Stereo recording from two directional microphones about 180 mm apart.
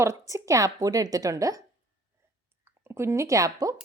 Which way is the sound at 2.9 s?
15° right (ahead or behind).